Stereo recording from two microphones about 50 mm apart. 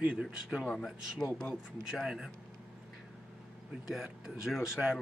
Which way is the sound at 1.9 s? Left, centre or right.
Centre.